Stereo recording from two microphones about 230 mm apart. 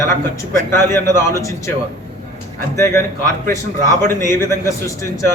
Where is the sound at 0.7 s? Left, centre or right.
Centre.